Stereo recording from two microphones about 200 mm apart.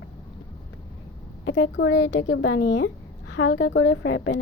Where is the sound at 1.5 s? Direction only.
65° left (ahead or behind).